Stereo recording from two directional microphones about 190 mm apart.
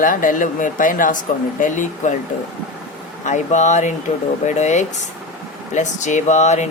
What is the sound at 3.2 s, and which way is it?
Speech, 40° left (ahead or behind).